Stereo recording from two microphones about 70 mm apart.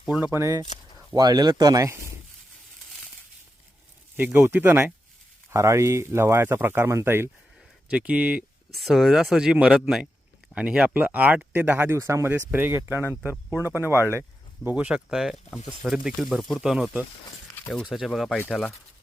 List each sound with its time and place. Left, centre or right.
0.2 s speech: right
1.1 s speech: right
4.4 s speech: right
5.5 s speech: right
7.9 s speech: centre
11.9 s speech: right
12.3 s speech: right
14.8 s speech: centre
17.8 s speech: centre
18.4 s speech: centre